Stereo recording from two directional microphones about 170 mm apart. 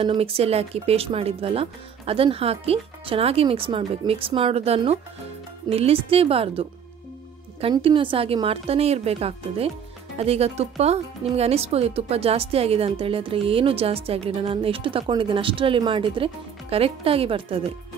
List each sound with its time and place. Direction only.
0.0 s speech: 30° right (ahead or behind)
7.6 s speech: 30° right (ahead or behind)